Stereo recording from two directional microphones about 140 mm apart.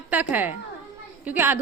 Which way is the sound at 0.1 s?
10° right (ahead or behind).